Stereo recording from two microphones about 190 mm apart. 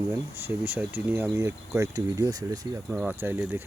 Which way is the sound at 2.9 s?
10° right (ahead or behind).